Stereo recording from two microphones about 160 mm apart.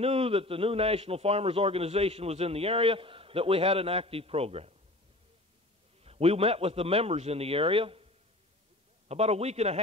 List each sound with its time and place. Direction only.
0.0 s a man's voice: 35° right (ahead or behind)
6.0 s a man's voice: 40° right (ahead or behind)